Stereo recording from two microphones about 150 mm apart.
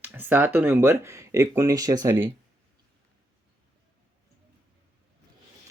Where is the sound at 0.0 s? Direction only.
10° right (ahead or behind).